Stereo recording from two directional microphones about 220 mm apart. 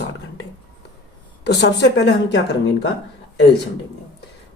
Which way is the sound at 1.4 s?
50° left (ahead or behind).